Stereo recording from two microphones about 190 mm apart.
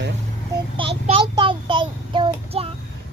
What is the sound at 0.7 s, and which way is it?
Child singing, 30° right (ahead or behind).